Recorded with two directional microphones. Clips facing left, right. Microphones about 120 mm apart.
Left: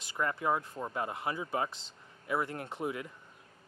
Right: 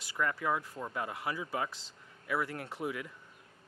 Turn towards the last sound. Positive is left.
turn(degrees=25)  # may be behind; listen again after turning